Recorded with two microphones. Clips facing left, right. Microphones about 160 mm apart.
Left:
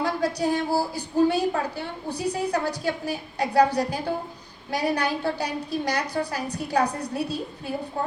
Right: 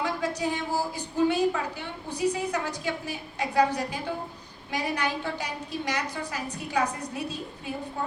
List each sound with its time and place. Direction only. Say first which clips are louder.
0.0 s a woman's voice: left 4 dB; 35° left (ahead or behind)